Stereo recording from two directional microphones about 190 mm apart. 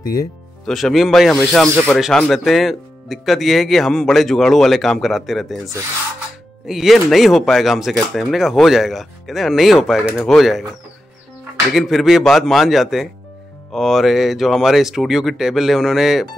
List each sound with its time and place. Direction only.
0.0 s speech: 20° left (ahead or behind)
0.7 s speech: centre (ahead or behind)
6.7 s speech: centre (ahead or behind)
11.7 s speech: centre (ahead or behind)